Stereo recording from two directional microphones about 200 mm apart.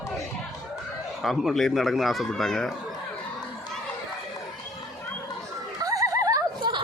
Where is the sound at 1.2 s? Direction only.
Centre (ahead or behind).